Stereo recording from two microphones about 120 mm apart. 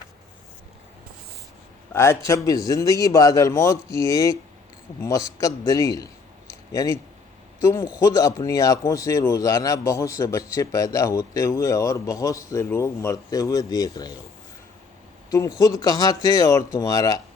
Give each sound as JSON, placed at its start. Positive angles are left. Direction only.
{"t": 1.9, "sound": "speech", "side_deg": 20}
{"t": 6.5, "sound": "a sound", "side_deg": 30}
{"t": 7.6, "sound": "speech", "side_deg": 25}
{"t": 15.3, "sound": "speech", "side_deg": 25}